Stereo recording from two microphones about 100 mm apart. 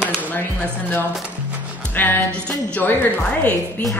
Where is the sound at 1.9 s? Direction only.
20° left (ahead or behind).